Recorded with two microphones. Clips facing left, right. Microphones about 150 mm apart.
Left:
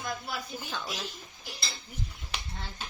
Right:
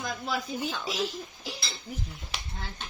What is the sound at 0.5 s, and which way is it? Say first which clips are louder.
Speech: right 6 dB; centre (ahead or behind).